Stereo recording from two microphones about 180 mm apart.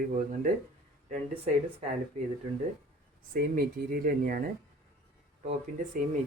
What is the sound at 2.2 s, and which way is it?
Speech, 35° right (ahead or behind).